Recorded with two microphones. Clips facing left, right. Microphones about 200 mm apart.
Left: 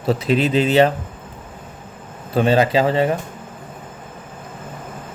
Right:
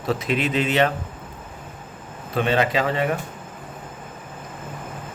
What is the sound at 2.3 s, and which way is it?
Speech, 35° left (ahead or behind).